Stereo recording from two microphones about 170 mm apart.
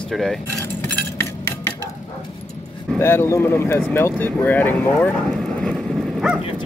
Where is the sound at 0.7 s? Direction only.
10° left (ahead or behind).